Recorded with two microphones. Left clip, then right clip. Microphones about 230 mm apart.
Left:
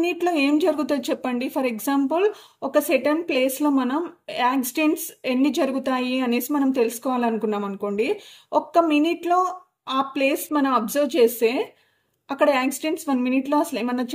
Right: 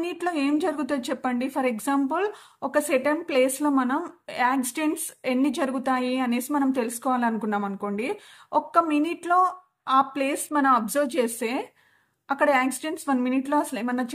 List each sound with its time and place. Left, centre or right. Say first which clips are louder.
0.0 s speech: left 5 dB; right